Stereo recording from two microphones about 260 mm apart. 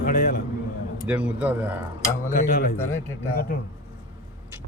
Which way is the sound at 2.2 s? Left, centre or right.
Left.